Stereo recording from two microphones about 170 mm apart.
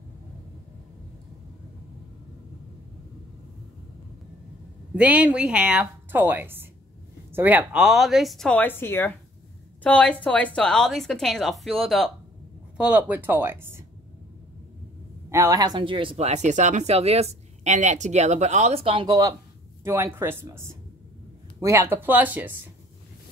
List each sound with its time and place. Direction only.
4.9 s a woman's voice: 10° right (ahead or behind)
15.2 s speech: 15° right (ahead or behind); by 19.1 s 30° right (ahead or behind)
19.8 s a woman's voice: 15° right (ahead or behind)